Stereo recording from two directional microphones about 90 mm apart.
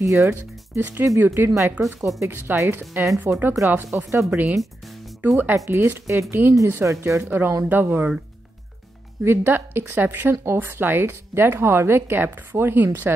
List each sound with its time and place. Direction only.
0.0 s speech: 35° right (ahead or behind)
0.3 s speech: 20° right (ahead or behind)
1.5 s speech: 35° right (ahead or behind)
2.0 s speech: centre (ahead or behind)
2.2 s speech: 25° right (ahead or behind)
4.6 s music: centre (ahead or behind)
5.3 s speech: 25° right (ahead or behind)
9.2 s speech: 25° right (ahead or behind)